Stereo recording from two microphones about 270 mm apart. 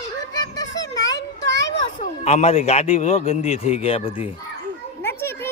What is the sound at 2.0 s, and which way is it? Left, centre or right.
A man's voice, left.